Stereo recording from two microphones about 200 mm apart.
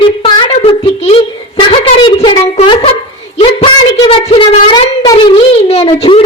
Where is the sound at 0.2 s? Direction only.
25° left (ahead or behind).